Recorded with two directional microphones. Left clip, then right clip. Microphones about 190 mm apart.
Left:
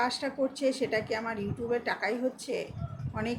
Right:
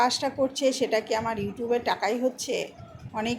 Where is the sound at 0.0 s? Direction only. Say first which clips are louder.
Right 6 dB; centre (ahead or behind).